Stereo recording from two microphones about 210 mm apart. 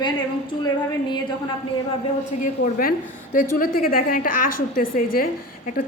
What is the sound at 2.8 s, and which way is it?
A woman's voice, 45° left (ahead or behind).